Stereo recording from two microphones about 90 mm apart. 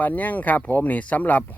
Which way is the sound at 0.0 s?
20° left (ahead or behind).